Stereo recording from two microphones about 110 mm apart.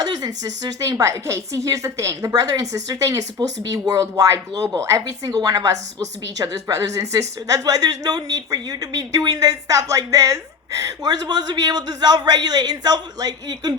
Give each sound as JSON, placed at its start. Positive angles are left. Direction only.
{"t": 0.0, "sound": "a woman's voice", "side_deg": -35}